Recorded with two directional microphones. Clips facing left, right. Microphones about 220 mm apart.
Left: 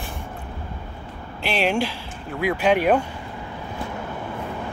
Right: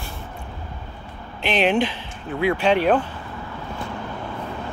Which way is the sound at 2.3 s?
10° left (ahead or behind).